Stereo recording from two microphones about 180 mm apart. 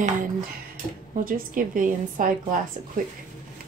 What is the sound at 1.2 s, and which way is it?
A woman's voice, 50° right (ahead or behind).